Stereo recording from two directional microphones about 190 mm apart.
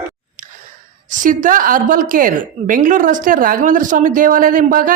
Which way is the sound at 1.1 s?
45° right (ahead or behind).